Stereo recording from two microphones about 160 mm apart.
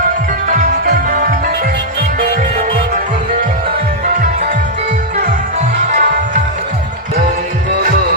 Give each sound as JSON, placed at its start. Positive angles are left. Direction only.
{"t": 0.4, "sound": "music", "side_deg": -55}
{"t": 5.9, "sound": "music", "side_deg": -55}